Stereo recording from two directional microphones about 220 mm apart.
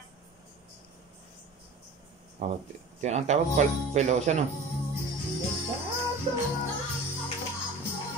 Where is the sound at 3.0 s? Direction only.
30° right (ahead or behind).